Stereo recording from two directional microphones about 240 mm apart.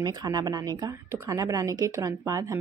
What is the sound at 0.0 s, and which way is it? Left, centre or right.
A woman's voice, centre.